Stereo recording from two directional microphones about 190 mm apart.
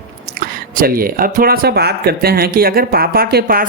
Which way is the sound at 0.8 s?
50° right (ahead or behind).